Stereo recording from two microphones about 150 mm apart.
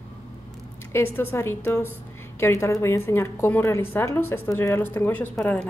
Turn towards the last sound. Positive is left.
turn(degrees=10)  # may be behind; listen again after turning